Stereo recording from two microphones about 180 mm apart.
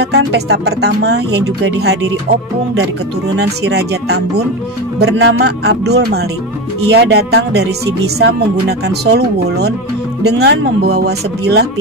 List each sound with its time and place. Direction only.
0.0 s speech: 65° right (ahead or behind)
3.3 s speech: 65° right (ahead or behind)
5.0 s speech: 80° right